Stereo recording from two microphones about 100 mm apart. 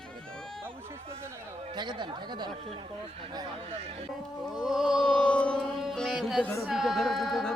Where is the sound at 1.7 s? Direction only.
50° right (ahead or behind).